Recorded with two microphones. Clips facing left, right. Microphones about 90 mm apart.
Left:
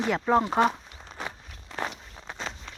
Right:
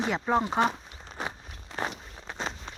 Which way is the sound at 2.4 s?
25° right (ahead or behind).